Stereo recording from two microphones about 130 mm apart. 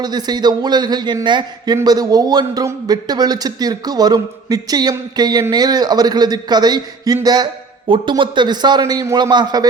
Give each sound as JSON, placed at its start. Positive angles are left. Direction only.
{"t": 0.0, "sound": "a man's voice", "side_deg": -30}